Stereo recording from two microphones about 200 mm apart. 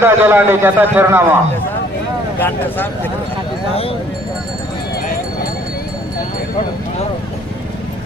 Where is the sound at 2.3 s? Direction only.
10° left (ahead or behind).